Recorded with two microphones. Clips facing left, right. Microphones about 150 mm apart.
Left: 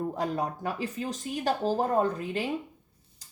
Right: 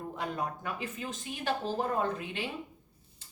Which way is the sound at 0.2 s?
35° left (ahead or behind).